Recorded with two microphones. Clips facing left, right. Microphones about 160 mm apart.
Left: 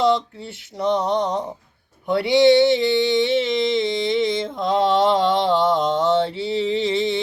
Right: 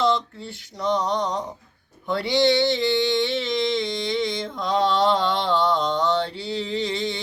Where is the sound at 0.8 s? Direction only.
25° left (ahead or behind).